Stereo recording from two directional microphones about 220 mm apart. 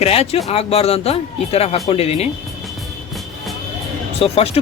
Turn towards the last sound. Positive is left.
turn(degrees=25)  # may be behind; listen again after turning